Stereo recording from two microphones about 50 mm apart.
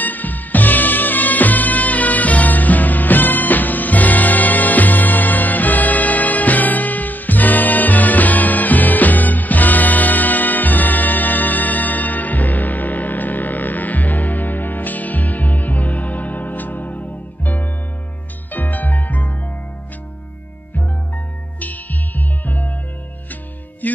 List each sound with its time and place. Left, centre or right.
0.0 s music: left
21.5 s music: left
23.8 s music: left